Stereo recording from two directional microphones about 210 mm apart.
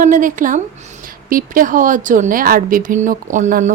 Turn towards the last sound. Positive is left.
turn(degrees=-35)  # may be behind; listen again after turning